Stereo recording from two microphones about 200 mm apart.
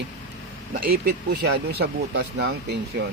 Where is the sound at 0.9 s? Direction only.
55° right (ahead or behind).